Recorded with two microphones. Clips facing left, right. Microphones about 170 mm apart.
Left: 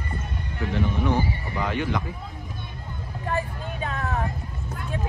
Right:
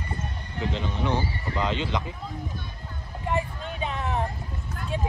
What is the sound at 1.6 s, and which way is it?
Speech, 20° right (ahead or behind).